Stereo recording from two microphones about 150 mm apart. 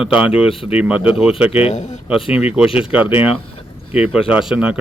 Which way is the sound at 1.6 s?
55° left (ahead or behind).